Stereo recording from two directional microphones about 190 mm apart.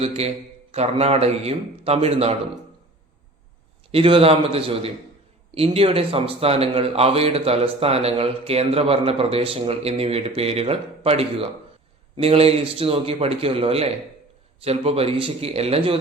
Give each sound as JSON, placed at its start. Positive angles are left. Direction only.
{"t": 0.0, "sound": "speech", "side_deg": -35}
{"t": 3.9, "sound": "speech", "side_deg": -30}